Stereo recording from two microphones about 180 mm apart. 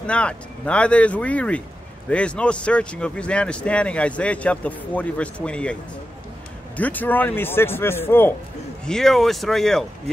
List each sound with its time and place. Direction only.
0.0 s speech: 5° left (ahead or behind)
6.8 s speech: 10° left (ahead or behind)